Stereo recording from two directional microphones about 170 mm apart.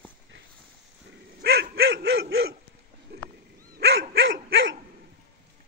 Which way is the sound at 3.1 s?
65° right (ahead or behind).